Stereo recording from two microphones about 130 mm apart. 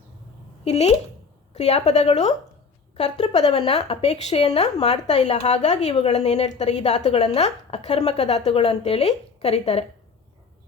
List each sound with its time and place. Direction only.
0.6 s a woman's voice: 55° left (ahead or behind)